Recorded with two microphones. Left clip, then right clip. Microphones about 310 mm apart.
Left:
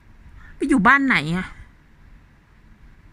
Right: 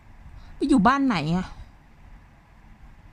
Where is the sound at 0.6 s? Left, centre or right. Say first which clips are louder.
Left 1 dB; centre.